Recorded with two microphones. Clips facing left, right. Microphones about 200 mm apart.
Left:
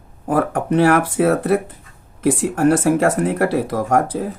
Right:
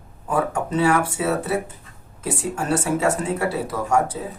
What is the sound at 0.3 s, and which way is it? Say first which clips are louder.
Speech: left 5 dB; 80° left.